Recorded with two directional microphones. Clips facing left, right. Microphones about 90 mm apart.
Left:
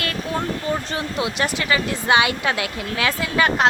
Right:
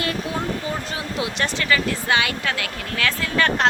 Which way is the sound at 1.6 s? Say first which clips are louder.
Right 1 dB; 20° left (ahead or behind).